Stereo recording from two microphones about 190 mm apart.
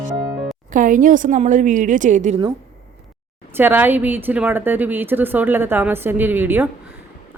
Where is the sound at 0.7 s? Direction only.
45° right (ahead or behind).